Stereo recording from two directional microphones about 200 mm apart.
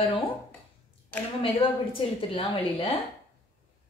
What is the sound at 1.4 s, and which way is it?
A woman's voice, 25° left (ahead or behind).